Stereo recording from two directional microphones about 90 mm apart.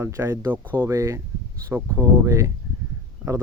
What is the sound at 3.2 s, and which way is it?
Speech, 15° right (ahead or behind).